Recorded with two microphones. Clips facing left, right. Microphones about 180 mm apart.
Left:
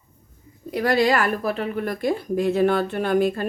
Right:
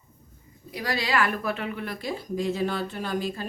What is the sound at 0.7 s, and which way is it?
Speech, 55° left (ahead or behind).